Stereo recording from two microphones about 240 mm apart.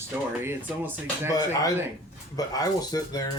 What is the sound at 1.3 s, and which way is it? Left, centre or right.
Speech, centre.